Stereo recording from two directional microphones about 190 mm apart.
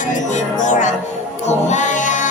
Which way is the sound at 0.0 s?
40° left (ahead or behind).